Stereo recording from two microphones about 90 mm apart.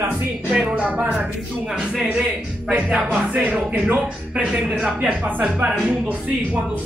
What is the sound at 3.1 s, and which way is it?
Speech, 15° right (ahead or behind).